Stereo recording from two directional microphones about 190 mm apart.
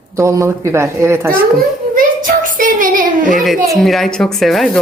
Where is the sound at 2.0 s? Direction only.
45° right (ahead or behind).